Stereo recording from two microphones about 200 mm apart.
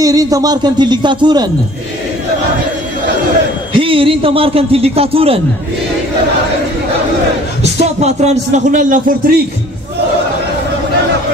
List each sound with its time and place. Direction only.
0.0 s a man's voice: 15° right (ahead or behind)
3.7 s a man's voice: 25° right (ahead or behind)
7.8 s speech: 35° right (ahead or behind)